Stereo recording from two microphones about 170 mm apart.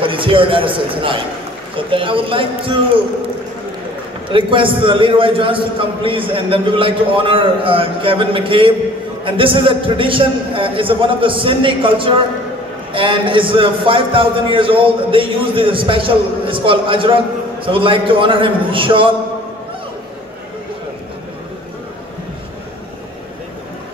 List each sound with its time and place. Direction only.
0.0 s a man's voice: 30° right (ahead or behind)
4.3 s a man's voice: 30° right (ahead or behind)